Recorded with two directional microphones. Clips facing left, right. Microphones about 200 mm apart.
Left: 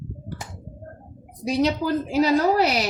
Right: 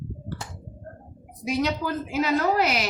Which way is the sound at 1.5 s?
35° left (ahead or behind).